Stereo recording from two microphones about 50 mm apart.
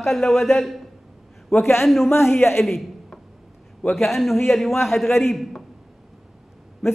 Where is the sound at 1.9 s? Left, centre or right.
Centre.